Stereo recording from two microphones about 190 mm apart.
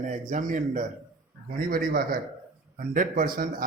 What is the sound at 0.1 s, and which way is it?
Speech, 40° right (ahead or behind).